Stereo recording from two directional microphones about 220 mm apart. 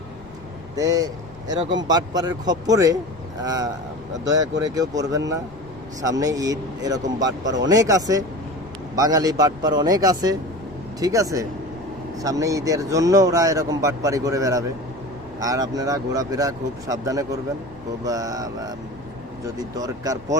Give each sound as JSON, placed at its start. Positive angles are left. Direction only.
{"t": 0.8, "sound": "speech", "side_deg": -15}
{"t": 7.4, "sound": "speech", "side_deg": -55}
{"t": 7.7, "sound": "speech", "side_deg": -15}